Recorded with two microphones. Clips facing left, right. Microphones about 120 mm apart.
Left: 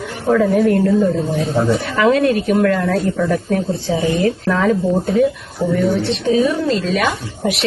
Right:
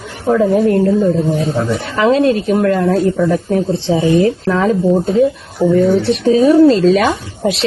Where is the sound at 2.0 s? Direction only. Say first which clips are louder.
Right 3 dB; 25° right (ahead or behind).